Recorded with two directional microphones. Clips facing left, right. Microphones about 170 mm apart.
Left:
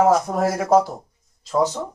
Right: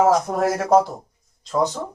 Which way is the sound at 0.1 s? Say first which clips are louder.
Even; centre (ahead or behind).